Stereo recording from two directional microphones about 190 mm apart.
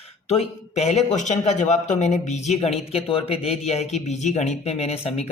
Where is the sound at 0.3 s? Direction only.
35° left (ahead or behind).